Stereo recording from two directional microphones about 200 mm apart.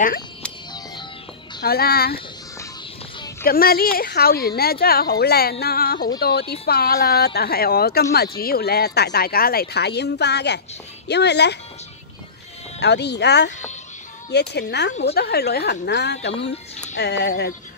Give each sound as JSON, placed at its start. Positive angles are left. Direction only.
{"t": 1.6, "sound": "speech", "side_deg": 50}
{"t": 3.4, "sound": "speech", "side_deg": 50}
{"t": 12.8, "sound": "speech", "side_deg": 55}